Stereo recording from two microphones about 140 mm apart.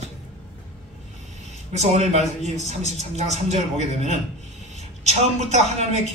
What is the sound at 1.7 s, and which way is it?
A man's voice, 50° right (ahead or behind).